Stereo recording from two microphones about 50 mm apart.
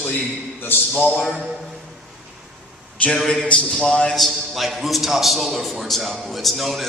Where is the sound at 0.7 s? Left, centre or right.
Left.